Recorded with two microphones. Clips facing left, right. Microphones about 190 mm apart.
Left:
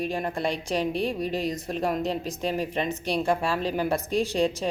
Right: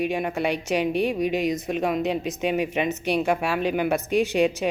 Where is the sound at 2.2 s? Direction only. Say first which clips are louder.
Right 4 dB; 35° left (ahead or behind).